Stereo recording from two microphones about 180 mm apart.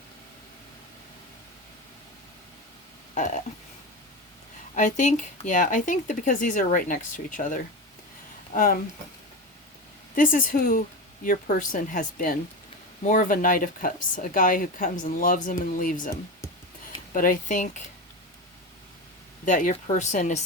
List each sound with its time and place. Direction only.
3.2 s speech: 45° left (ahead or behind)
4.7 s speech: 45° left (ahead or behind)
10.2 s speech: 50° left (ahead or behind)
19.5 s speech: 45° left (ahead or behind)